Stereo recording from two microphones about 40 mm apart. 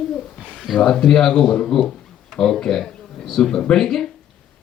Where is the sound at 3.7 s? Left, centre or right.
Centre.